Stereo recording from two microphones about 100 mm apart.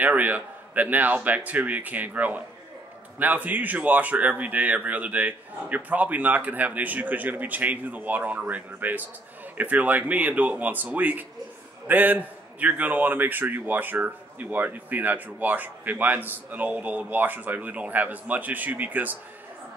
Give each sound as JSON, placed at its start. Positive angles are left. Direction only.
{"t": 0.0, "sound": "a man's voice", "side_deg": -15}